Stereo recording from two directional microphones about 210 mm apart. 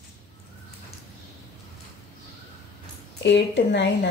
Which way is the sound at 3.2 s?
55° left (ahead or behind).